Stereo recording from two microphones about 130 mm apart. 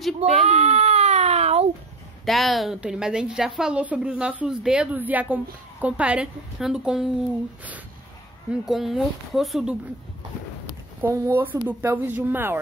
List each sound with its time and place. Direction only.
0.2 s a sound: 55° right (ahead or behind)
2.2 s a woman's voice: centre (ahead or behind)
8.6 s speech: centre (ahead or behind)
11.0 s a woman's voice: 20° right (ahead or behind)